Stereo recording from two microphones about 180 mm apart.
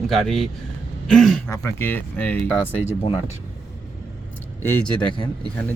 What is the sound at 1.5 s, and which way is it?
Speech, 15° left (ahead or behind).